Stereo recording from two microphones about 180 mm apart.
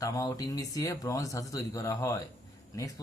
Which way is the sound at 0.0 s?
20° left (ahead or behind).